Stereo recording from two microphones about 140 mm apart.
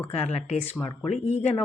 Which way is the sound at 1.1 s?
55° left (ahead or behind).